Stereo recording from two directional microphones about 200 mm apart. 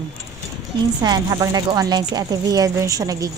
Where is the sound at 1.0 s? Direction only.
20° right (ahead or behind).